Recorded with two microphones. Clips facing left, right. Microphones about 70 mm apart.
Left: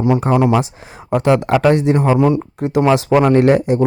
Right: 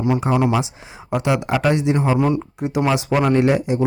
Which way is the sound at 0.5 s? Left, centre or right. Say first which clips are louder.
Left 5 dB; left.